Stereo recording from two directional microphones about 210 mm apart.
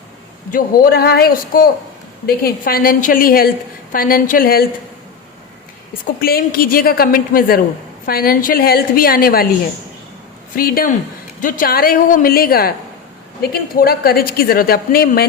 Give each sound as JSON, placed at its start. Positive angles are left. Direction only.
{"t": 0.5, "sound": "a woman's voice", "side_deg": 45}
{"t": 6.1, "sound": "a woman's voice", "side_deg": 45}
{"t": 10.5, "sound": "a woman's voice", "side_deg": 45}